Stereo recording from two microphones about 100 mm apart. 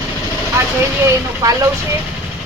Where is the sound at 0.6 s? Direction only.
25° right (ahead or behind).